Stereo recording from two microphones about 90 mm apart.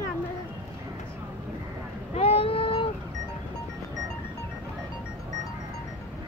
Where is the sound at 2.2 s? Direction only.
90° left.